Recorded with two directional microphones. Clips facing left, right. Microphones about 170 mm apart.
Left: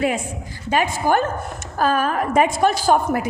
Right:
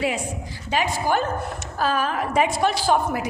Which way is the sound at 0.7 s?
50° left (ahead or behind).